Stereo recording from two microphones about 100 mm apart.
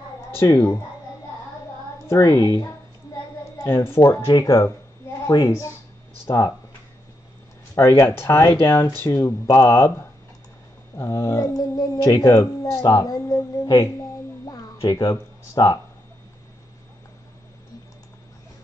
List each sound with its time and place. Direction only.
0.4 s speech: 25° left (ahead or behind)
2.0 s speech: 30° left (ahead or behind)
4.3 s speech: 40° left (ahead or behind)
7.7 s speech: 30° left (ahead or behind)
14.9 s speech: 40° left (ahead or behind)